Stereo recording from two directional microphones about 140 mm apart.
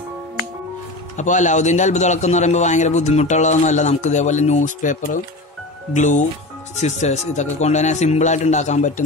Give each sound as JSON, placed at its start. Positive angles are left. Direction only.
{"t": 1.1, "sound": "a man's voice", "side_deg": 60}